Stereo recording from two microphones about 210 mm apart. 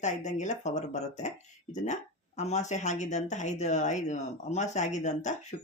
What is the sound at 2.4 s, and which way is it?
Speech, 35° left (ahead or behind).